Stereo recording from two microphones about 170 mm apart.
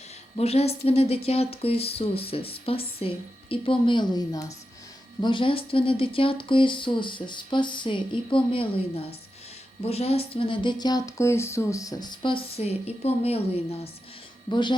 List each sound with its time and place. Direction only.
0.3 s a woman's voice: 35° left (ahead or behind)